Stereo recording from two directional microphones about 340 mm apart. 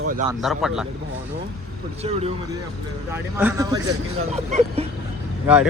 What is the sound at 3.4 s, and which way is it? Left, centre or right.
A man's voice, centre.